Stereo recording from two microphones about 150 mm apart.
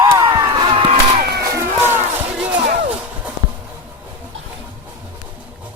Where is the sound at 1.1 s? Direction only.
90° right.